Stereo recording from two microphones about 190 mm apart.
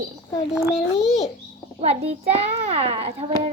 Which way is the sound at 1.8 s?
35° right (ahead or behind).